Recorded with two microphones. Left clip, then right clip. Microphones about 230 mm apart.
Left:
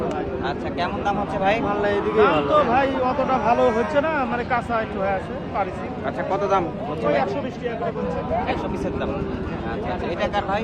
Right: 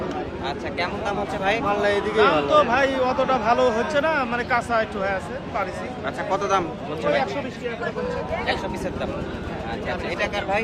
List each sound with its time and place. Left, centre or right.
0.4 s speech: centre
1.8 s a man's voice: centre
6.3 s a man's voice: centre
10.2 s speech: centre